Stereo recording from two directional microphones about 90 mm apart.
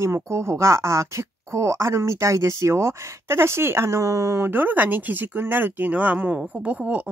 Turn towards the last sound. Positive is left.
turn(degrees=-15)  # may be behind; listen again after turning